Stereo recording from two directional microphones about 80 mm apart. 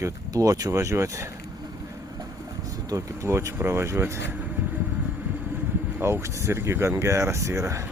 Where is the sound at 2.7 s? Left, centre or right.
Right.